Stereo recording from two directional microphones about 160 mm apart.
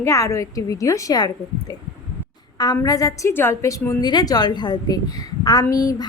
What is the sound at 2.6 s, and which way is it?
A woman's voice, 25° left (ahead or behind).